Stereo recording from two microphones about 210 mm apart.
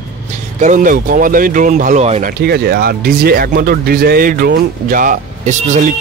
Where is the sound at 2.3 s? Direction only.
50° right (ahead or behind).